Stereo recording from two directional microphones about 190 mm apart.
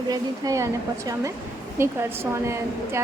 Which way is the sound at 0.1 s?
15° right (ahead or behind).